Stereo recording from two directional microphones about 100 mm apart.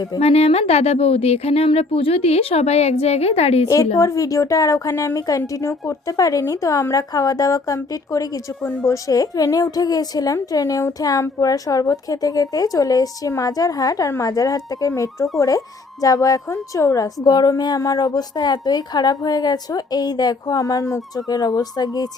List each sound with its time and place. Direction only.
0.2 s speech: 90° left
3.9 s speech: 30° left (ahead or behind)